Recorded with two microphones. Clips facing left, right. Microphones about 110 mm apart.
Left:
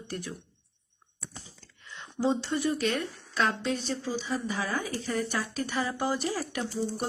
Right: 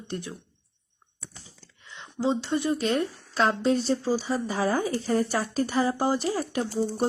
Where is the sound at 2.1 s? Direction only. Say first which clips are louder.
Right 2 dB; 15° right (ahead or behind).